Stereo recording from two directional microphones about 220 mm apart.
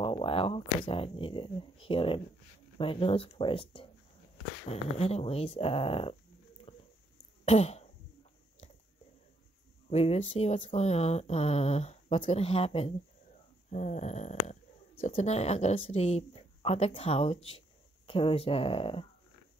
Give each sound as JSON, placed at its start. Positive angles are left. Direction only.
{"t": 0.0, "sound": "speech", "side_deg": 25}
{"t": 6.7, "sound": "a sound", "side_deg": 25}
{"t": 7.4, "sound": "throat clearing", "side_deg": 30}
{"t": 9.8, "sound": "speech", "side_deg": 30}